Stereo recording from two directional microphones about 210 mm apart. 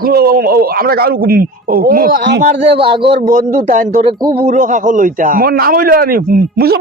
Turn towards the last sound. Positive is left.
turn(degrees=-45)  # may be behind; listen again after turning